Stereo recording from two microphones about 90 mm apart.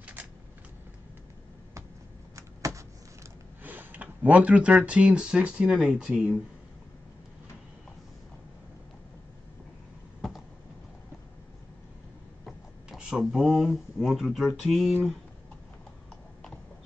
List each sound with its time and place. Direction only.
0.0 s shuffling cards: 15° right (ahead or behind)
2.3 s a sound: 35° right (ahead or behind)
3.6 s speech: 20° right (ahead or behind)
12.4 s speech: 5° right (ahead or behind)